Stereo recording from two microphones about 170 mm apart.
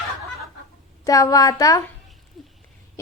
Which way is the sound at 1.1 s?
20° left (ahead or behind).